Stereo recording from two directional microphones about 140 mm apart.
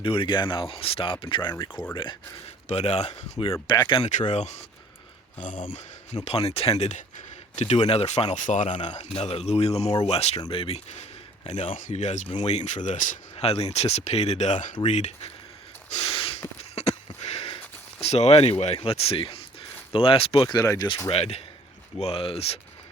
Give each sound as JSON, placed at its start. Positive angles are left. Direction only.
{"t": 0.0, "sound": "speech", "side_deg": 40}
{"t": 2.6, "sound": "speech", "side_deg": 50}
{"t": 3.5, "sound": "speech", "side_deg": 30}
{"t": 4.3, "sound": "speech", "side_deg": 55}
{"t": 5.4, "sound": "speech", "side_deg": 70}
{"t": 6.2, "sound": "speech", "side_deg": 45}
{"t": 13.3, "sound": "speech", "side_deg": 45}
{"t": 15.9, "sound": "gasp", "side_deg": 45}
{"t": 16.7, "sound": "a sound", "side_deg": 50}
{"t": 18.0, "sound": "speech", "side_deg": 50}
{"t": 20.6, "sound": "speech", "side_deg": 25}
{"t": 21.1, "sound": "speech", "side_deg": 45}